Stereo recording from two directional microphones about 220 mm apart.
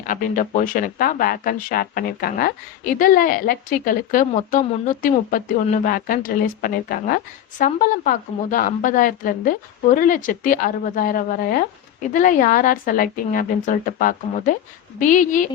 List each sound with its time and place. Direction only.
0.0 s speech: 40° left (ahead or behind)